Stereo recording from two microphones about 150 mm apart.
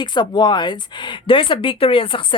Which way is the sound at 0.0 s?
30° left (ahead or behind).